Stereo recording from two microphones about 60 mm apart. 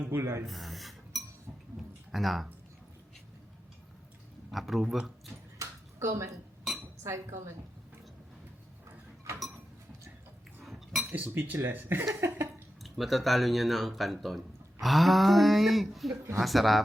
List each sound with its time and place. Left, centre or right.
0.2 s speech: right
0.4 s speech: centre
4.5 s speech: centre
5.5 s a sound: right
6.7 s dishes: centre
7.0 s speech: right
10.6 s a sound: centre
11.1 s speech: right
12.8 s speech: centre